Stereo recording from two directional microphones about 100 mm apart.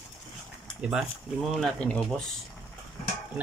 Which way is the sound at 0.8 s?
10° right (ahead or behind).